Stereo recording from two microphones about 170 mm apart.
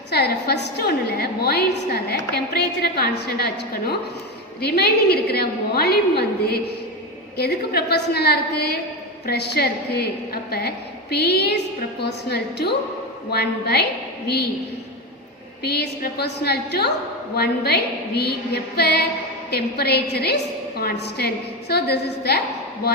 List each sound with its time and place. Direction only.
0.1 s a woman's voice: 75° left (ahead or behind)
15.6 s a woman's voice: 70° left (ahead or behind)